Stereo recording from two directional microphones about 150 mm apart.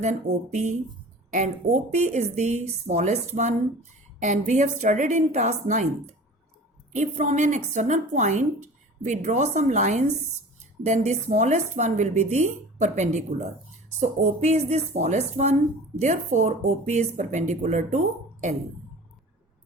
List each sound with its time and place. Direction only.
0.0 s speech: 50° right (ahead or behind)